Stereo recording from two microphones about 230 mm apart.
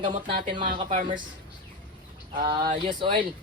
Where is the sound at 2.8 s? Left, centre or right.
Right.